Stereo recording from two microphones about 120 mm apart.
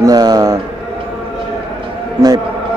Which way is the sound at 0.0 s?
35° right (ahead or behind).